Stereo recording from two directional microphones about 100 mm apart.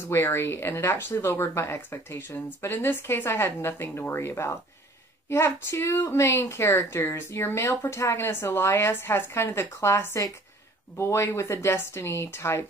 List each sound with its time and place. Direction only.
0.1 s a woman's voice: 25° left (ahead or behind)